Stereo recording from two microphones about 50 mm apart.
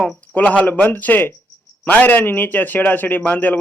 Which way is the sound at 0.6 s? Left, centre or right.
Left.